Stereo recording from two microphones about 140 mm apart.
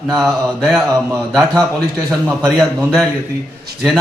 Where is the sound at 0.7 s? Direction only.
Centre (ahead or behind).